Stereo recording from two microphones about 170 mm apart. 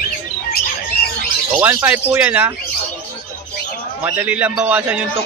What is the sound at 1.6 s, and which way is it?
Speech, 10° right (ahead or behind).